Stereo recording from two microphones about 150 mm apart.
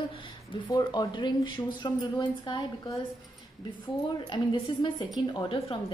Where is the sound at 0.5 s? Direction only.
30° left (ahead or behind).